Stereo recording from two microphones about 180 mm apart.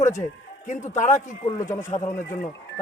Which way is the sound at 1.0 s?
40° left (ahead or behind).